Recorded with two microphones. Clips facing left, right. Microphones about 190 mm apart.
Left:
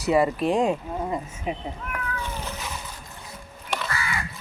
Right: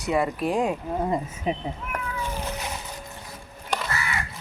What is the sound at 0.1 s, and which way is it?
Speech, centre (ahead or behind).